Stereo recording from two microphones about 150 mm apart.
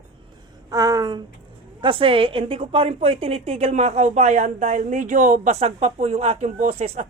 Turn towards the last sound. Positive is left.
turn(degrees=-45)  # may be behind; listen again after turning